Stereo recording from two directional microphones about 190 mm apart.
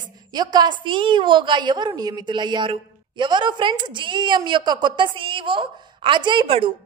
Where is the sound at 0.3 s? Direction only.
20° right (ahead or behind).